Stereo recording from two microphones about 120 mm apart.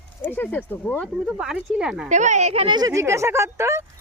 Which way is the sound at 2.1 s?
90° right.